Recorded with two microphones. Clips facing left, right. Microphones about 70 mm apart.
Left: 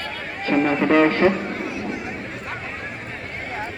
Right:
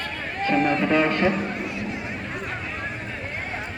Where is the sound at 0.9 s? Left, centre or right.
Left.